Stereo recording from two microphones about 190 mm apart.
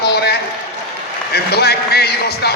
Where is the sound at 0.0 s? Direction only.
60° left (ahead or behind).